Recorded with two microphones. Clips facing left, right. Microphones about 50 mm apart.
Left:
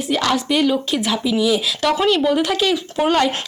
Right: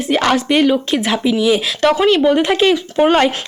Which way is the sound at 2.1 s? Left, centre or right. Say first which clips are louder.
Right 4 dB; right.